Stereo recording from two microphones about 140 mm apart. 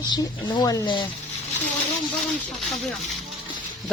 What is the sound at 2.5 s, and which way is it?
Speech, centre (ahead or behind).